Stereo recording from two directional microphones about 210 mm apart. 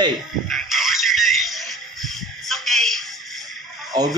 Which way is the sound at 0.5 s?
Centre (ahead or behind).